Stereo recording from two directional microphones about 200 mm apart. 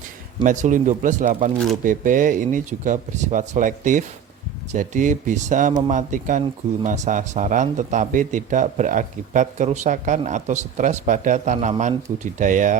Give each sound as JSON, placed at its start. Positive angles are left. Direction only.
{"t": 0.4, "sound": "a man's voice", "side_deg": -40}